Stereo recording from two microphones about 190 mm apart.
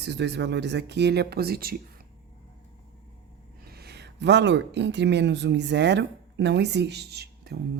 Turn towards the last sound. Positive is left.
turn(degrees=-60)  # may be behind; listen again after turning